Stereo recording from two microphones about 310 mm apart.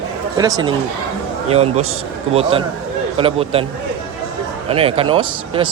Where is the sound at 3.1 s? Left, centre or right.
Centre.